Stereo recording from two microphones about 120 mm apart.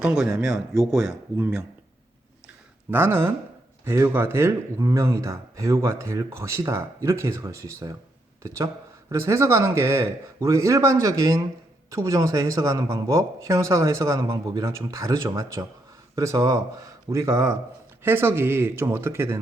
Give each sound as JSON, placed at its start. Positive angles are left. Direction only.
{"t": 0.0, "sound": "speech", "side_deg": -5}
{"t": 2.9, "sound": "speech", "side_deg": -20}